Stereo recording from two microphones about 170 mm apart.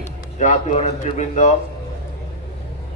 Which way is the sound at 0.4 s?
45° left (ahead or behind).